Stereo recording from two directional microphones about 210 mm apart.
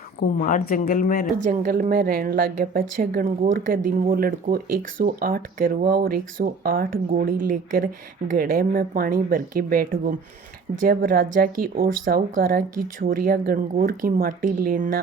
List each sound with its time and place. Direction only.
0.2 s speech: 40° left (ahead or behind)
1.5 s a woman's voice: 40° right (ahead or behind)